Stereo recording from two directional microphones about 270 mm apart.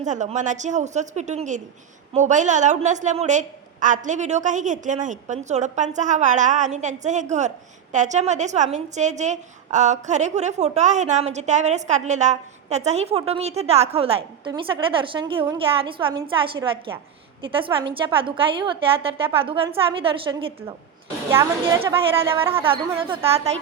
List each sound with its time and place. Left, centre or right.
0.0 s a woman's voice: right; by 22.6 s centre
22.6 s a woman's voice: centre